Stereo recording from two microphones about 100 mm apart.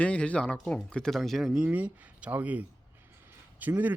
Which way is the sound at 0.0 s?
10° left (ahead or behind).